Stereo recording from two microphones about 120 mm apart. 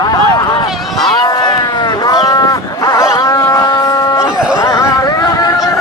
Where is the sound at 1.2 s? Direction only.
35° left (ahead or behind).